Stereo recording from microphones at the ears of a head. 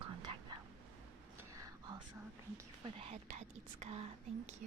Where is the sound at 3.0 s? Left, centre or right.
Right.